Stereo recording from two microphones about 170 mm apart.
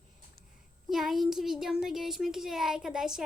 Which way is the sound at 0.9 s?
Centre (ahead or behind).